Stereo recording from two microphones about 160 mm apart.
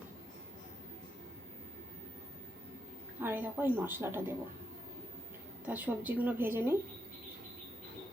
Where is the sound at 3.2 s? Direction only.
15° right (ahead or behind).